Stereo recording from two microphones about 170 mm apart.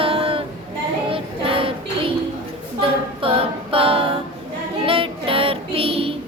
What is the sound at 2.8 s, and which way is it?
A capella, 30° right (ahead or behind).